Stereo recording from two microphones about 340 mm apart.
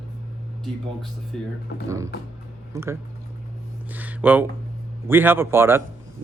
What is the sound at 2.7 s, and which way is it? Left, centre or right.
Speech, centre.